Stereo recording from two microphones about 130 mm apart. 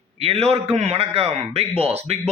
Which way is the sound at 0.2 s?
50° right (ahead or behind).